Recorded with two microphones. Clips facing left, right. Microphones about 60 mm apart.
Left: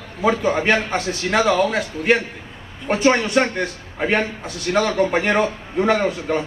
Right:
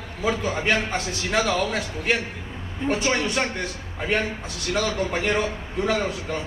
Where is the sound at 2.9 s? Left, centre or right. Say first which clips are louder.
Left 6 dB; left.